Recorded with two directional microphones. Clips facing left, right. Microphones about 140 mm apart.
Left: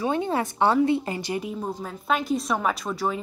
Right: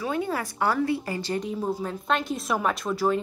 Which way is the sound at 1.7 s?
5° right (ahead or behind).